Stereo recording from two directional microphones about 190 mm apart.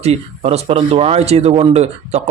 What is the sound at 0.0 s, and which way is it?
A man's voice, 35° right (ahead or behind).